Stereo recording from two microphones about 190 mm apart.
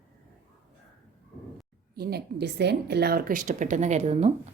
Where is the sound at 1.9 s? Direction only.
55° right (ahead or behind); by 4.3 s 35° right (ahead or behind).